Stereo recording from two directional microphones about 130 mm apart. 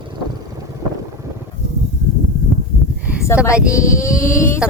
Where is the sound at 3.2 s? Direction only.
20° left (ahead or behind).